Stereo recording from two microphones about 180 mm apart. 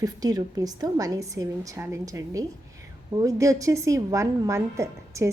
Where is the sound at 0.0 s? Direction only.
20° right (ahead or behind).